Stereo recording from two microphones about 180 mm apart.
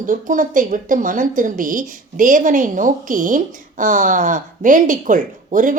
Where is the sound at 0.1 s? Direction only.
45° right (ahead or behind).